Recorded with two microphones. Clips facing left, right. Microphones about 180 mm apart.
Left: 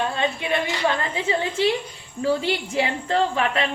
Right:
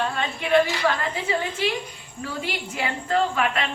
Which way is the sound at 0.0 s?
20° left (ahead or behind).